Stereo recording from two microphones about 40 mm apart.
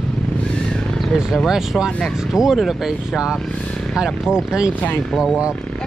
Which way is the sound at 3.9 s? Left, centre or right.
Centre.